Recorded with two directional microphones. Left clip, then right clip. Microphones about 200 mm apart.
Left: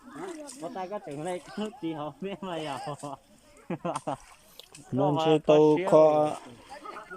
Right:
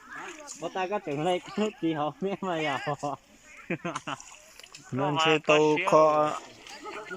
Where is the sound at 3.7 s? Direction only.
20° left (ahead or behind).